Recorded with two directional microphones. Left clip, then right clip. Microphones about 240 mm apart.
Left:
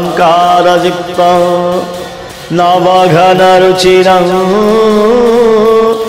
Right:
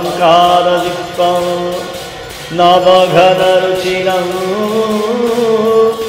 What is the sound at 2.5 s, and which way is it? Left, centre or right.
Music, left.